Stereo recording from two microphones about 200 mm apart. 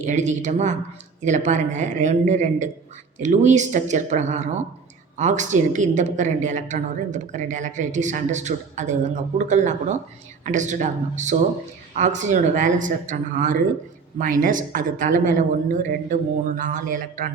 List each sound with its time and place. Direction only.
0.0 s a woman's voice: 35° right (ahead or behind)